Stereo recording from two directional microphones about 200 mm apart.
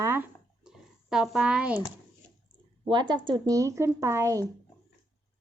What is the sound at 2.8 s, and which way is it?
A woman's voice, 25° right (ahead or behind).